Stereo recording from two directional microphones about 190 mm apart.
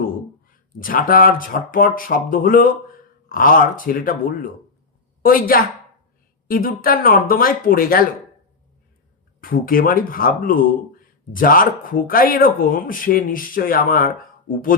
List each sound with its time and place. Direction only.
0.5 s speech: 45° left (ahead or behind)
9.4 s speech: 50° left (ahead or behind)